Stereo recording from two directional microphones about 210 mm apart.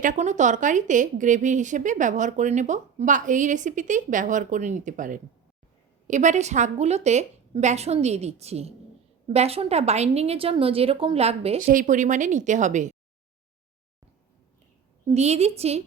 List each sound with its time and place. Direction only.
0.0 s a woman's voice: 35° right (ahead or behind)
11.6 s speech: 40° right (ahead or behind)
15.1 s speech: 30° right (ahead or behind)